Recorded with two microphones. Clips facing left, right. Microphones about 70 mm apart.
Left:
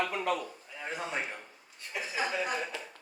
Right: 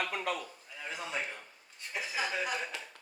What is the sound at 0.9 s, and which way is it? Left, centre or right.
Speech, left.